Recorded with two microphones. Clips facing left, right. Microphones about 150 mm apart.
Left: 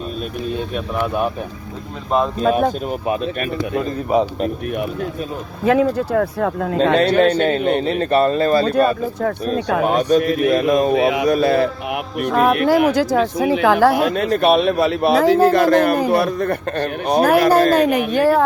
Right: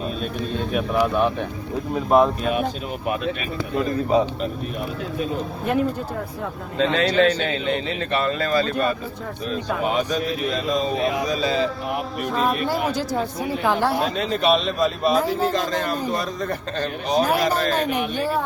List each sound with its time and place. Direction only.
0.7 s speech: centre (ahead or behind)
2.0 s speech: 10° right (ahead or behind)
2.4 s speech: 40° left (ahead or behind)
5.6 s speech: 90° left
7.1 s a man's voice: 55° left (ahead or behind); by 9.0 s 35° left (ahead or behind)
9.8 s a man's voice: 50° left (ahead or behind)
17.8 s speech: 90° left